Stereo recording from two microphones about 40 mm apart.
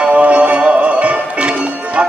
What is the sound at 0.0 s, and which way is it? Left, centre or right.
Music, right.